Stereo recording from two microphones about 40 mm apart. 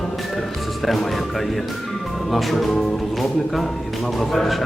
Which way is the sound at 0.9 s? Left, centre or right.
Centre.